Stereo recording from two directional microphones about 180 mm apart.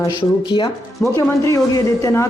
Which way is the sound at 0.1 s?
25° left (ahead or behind).